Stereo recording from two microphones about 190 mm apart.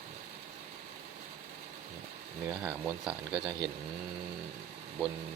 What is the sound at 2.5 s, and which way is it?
Speech, 5° right (ahead or behind).